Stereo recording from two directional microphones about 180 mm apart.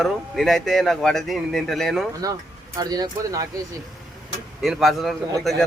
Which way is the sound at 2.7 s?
20° right (ahead or behind).